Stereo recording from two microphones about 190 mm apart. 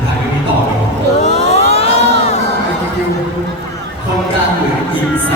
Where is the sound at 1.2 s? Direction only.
35° left (ahead or behind).